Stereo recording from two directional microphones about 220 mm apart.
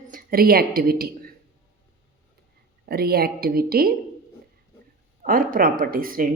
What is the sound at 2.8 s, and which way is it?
Speech, 45° right (ahead or behind).